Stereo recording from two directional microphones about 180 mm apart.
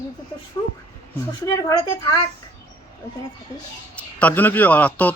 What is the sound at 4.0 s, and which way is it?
A man's voice, 5° left (ahead or behind).